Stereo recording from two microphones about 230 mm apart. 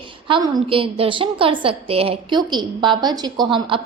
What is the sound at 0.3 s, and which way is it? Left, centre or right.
A woman's voice, right.